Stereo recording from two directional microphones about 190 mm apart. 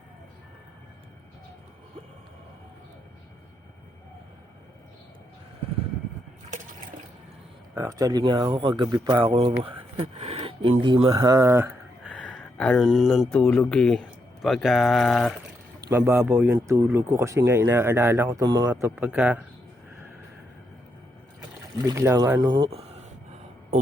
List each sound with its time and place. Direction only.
7.8 s speech: 20° right (ahead or behind)
12.0 s speech: 5° left (ahead or behind)
15.9 s speech: 10° right (ahead or behind)
21.8 s speech: 15° right (ahead or behind)
22.4 s speech: 25° right (ahead or behind)